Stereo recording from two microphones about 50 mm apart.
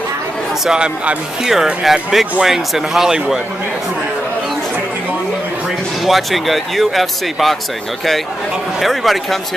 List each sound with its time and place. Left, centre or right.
0.7 s speech: centre
1.8 s speech: centre
6.0 s speech: centre
8.7 s speech: centre